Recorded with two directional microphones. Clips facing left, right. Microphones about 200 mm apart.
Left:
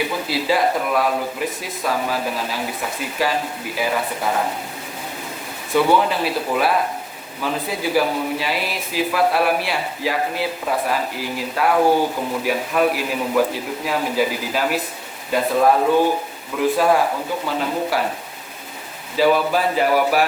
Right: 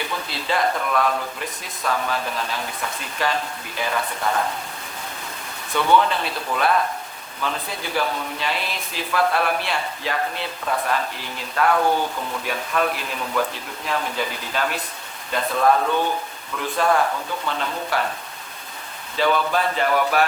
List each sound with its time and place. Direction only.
0.0 s speech: 5° left (ahead or behind)
5.7 s speech: 10° left (ahead or behind)
11.8 s speech: 35° left (ahead or behind)
12.4 s speech: 10° left (ahead or behind)
19.1 s speech: 10° left (ahead or behind)